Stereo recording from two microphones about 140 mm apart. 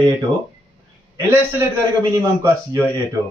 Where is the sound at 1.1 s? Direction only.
20° right (ahead or behind).